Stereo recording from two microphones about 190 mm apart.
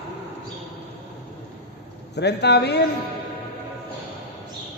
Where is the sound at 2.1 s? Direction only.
60° left (ahead or behind).